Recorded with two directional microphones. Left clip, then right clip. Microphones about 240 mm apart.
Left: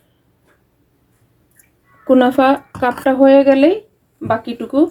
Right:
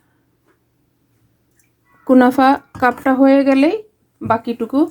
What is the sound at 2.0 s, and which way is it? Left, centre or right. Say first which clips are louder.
Speech: even; right.